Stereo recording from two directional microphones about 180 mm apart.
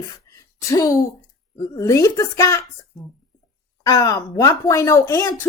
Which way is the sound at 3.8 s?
20° left (ahead or behind).